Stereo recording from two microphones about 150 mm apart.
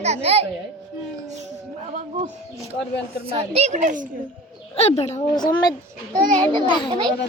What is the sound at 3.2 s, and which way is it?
Speech, 45° right (ahead or behind).